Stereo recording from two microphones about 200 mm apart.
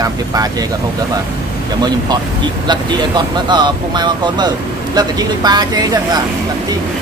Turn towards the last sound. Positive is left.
turn(degrees=-20)  # may be behind; listen again after turning